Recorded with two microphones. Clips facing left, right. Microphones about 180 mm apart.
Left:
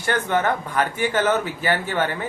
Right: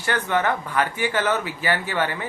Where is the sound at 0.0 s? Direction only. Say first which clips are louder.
Left 1 dB; 45° left (ahead or behind).